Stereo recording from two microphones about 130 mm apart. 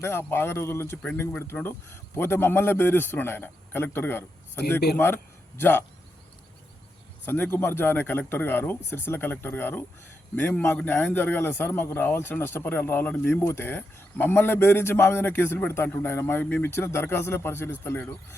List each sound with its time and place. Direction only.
0.0 s a man's voice: 20° left (ahead or behind)
7.3 s a man's voice: 15° left (ahead or behind)